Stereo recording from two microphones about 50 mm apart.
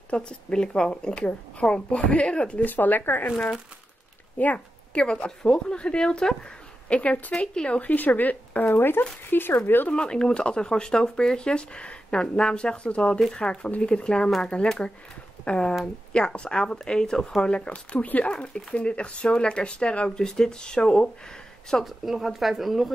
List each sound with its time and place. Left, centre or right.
0.1 s speech: centre
2.6 s speech: left
4.4 s speech: left
5.0 s speech: centre
6.9 s speech: left
7.3 s speech: centre
7.8 s speech: left
8.6 s speech: left
9.8 s speech: centre
21.8 s speech: centre